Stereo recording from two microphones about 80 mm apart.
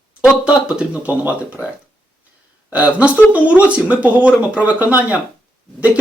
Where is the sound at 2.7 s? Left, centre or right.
Centre.